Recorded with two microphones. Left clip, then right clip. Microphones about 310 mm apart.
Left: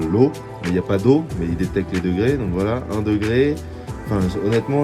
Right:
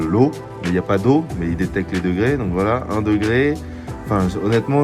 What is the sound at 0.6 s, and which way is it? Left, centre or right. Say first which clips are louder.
Speech: even; centre.